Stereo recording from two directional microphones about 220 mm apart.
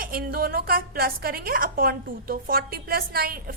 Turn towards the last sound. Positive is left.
turn(degrees=-40)  # may be behind; listen again after turning